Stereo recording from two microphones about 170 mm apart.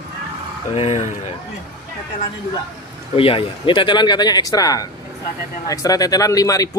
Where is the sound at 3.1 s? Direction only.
30° left (ahead or behind).